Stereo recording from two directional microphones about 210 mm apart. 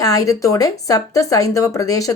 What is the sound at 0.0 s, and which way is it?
Speech, 15° left (ahead or behind).